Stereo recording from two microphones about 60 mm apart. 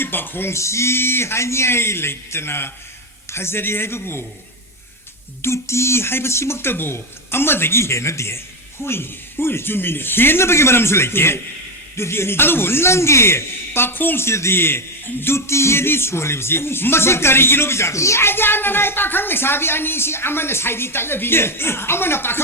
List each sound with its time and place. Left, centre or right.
0.0 s speech: left
5.4 s speech: left
8.8 s speech: left